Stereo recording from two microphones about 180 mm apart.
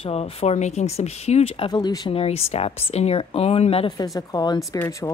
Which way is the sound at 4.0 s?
20° left (ahead or behind).